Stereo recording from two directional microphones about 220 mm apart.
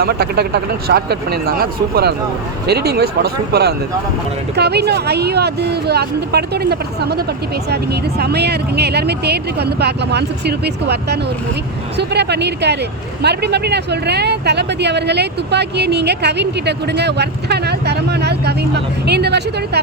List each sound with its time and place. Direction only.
0.0 s speech: 45° right (ahead or behind)